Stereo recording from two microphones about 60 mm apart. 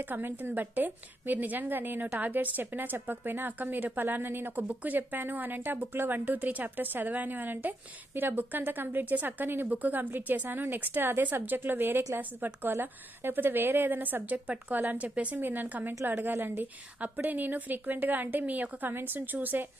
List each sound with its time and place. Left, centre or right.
0.0 s a woman's voice: right